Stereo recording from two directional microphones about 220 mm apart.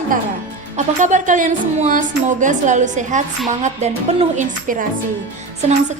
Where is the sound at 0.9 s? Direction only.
35° right (ahead or behind).